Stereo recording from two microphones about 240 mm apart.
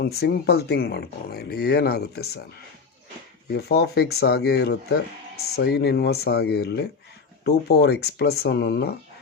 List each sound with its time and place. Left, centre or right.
0.0 s speech: left
3.5 s speech: left